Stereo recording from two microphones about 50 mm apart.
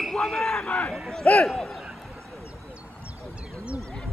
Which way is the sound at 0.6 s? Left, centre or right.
Left.